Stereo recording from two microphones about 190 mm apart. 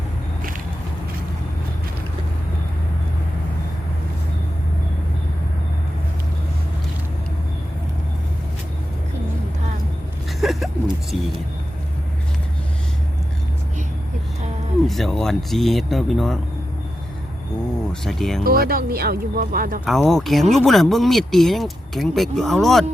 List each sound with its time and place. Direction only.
10.4 s a sound: centre (ahead or behind)
14.8 s speech: centre (ahead or behind)
18.0 s speech: centre (ahead or behind)
18.4 s speech: 50° right (ahead or behind)
19.8 s speech: centre (ahead or behind)